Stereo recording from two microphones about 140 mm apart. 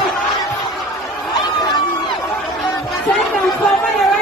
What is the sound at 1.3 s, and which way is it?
Chatter, 25° left (ahead or behind).